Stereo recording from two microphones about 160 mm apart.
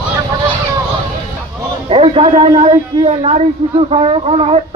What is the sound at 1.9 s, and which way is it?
Speech, 35° right (ahead or behind).